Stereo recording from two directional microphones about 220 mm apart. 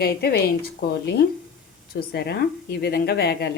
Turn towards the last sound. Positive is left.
turn(degrees=45)  # may be behind; listen again after turning